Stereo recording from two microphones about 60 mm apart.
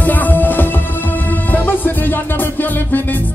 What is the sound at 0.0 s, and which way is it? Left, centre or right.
Music, left.